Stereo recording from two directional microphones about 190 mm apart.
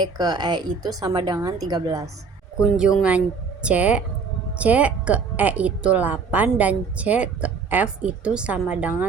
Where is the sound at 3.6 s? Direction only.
5° right (ahead or behind).